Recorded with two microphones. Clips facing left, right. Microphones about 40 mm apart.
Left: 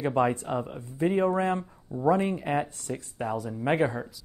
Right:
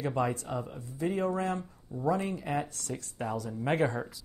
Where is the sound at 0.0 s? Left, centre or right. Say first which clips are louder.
Left 5 dB; left; by 4.0 s centre.